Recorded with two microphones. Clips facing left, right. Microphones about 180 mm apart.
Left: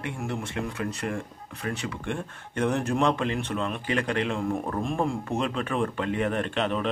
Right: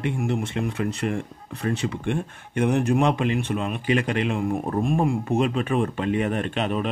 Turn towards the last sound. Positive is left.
turn(degrees=-15)  # may be behind; listen again after turning